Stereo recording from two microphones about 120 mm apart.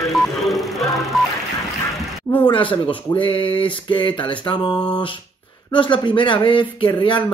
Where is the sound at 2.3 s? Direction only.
45° left (ahead or behind).